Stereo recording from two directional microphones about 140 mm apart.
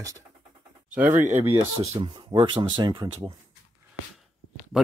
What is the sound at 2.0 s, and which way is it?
Speech, 30° right (ahead or behind).